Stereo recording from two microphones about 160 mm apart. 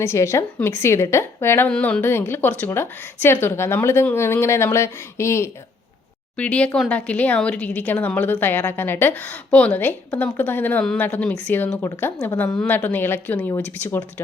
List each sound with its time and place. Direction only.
0.0 s a woman's voice: 15° left (ahead or behind)